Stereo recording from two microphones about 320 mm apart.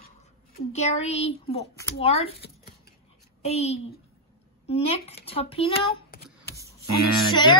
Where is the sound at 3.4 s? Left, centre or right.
Centre.